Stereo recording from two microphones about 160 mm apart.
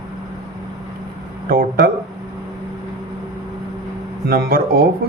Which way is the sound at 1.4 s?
65° right (ahead or behind).